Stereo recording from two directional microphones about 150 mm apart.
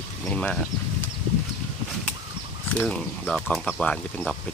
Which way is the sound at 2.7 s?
5° left (ahead or behind).